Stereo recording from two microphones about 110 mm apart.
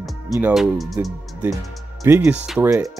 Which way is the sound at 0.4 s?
5° right (ahead or behind).